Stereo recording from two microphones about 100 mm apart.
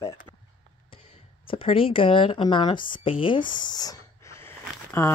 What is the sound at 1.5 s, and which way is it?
Speech, 65° left (ahead or behind).